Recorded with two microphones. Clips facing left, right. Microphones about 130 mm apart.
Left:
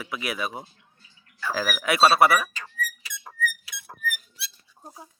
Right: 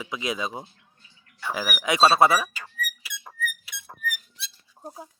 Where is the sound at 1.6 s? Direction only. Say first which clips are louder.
Even; 10° right (ahead or behind).